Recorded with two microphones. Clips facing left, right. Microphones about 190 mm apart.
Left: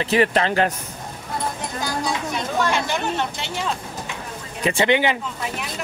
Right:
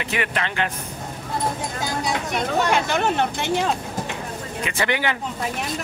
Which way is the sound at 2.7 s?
55° right (ahead or behind).